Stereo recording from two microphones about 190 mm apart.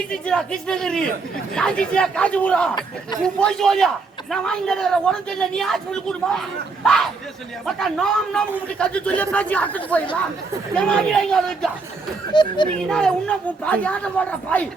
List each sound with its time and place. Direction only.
0.1 s a man's voice: 5° left (ahead or behind)
12.3 s speech: 25° left (ahead or behind)
12.9 s a man's voice: 5° left (ahead or behind)